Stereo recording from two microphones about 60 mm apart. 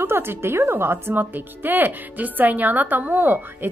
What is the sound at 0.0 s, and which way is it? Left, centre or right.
Speech, right.